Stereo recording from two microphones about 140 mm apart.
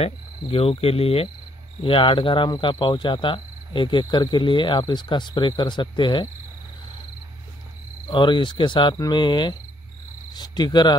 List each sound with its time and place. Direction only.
0.0 s cricket: 45° left (ahead or behind)
1.8 s speech: 40° left (ahead or behind)
8.1 s speech: 35° left (ahead or behind)